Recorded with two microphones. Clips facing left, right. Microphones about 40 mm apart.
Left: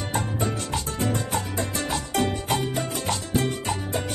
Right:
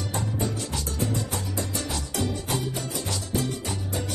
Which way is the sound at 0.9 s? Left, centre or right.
Left.